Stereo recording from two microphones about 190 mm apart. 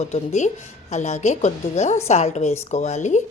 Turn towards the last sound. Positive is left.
turn(degrees=40)  # may be behind; listen again after turning